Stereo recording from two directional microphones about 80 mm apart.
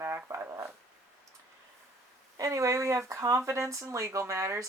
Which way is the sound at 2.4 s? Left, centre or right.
Right.